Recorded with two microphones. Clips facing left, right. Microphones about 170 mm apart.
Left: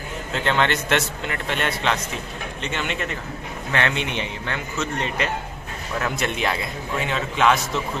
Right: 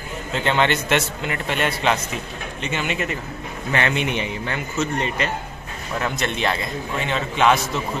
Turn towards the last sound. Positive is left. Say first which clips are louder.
# right 1 dB
turn(degrees=0)  # may be behind; listen again after turning